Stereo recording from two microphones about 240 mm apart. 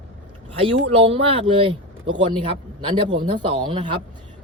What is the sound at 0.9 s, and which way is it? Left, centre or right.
Speech, right.